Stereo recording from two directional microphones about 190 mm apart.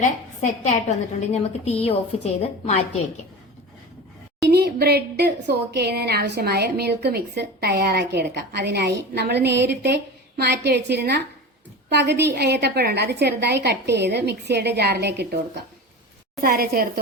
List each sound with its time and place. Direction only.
0.6 s a woman's voice: 35° left (ahead or behind)
4.4 s a woman's voice: 60° right (ahead or behind)
16.4 s a woman's voice: 50° right (ahead or behind)